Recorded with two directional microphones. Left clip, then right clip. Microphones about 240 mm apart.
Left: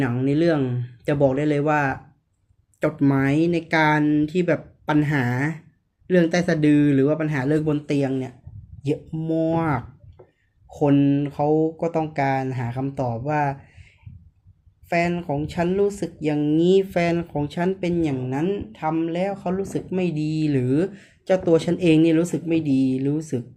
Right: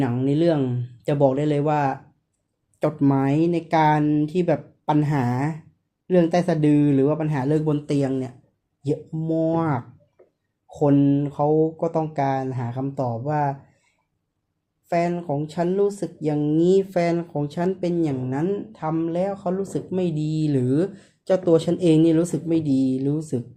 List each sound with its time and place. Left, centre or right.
0.0 s speech: centre
14.8 s speech: centre